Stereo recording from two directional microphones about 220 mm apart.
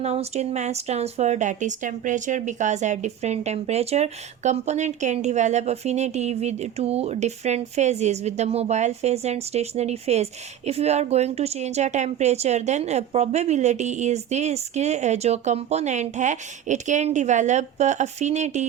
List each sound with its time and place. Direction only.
0.0 s speech: 30° right (ahead or behind)